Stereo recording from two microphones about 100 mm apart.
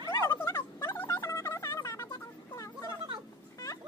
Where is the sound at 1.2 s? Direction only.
25° left (ahead or behind).